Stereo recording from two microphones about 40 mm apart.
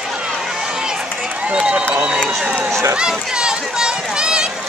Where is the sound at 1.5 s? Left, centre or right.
Right.